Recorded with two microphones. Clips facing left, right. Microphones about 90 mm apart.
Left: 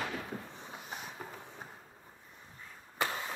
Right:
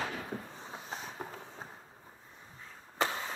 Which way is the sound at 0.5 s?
25° right (ahead or behind).